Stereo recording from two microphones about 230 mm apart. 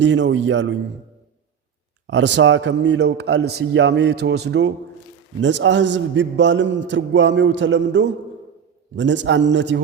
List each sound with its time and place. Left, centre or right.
0.0 s a man's voice: right
2.0 s a man's voice: right